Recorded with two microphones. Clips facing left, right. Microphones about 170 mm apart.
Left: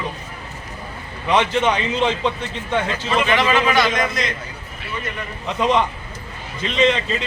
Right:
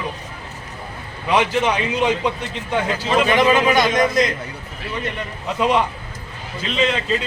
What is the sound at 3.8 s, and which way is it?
Speech, 45° right (ahead or behind).